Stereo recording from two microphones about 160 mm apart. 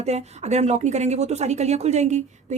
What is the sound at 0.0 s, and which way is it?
A woman's voice, 45° right (ahead or behind).